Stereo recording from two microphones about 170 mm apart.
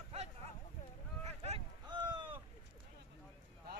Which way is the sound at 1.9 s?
25° right (ahead or behind).